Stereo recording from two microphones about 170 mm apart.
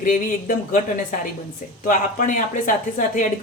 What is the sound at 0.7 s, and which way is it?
Speech, 55° left (ahead or behind).